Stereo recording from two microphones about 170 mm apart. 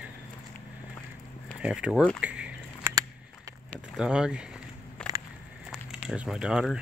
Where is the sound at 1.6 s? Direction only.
5° right (ahead or behind).